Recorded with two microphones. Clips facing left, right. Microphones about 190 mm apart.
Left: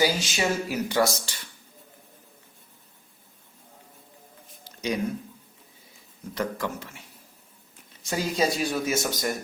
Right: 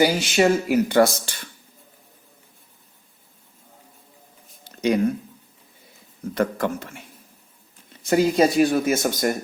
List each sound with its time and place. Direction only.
0.0 s speech: 60° right (ahead or behind)
4.6 s a sound: 55° right (ahead or behind)
6.3 s speech: 55° right (ahead or behind)
8.0 s speech: 55° right (ahead or behind)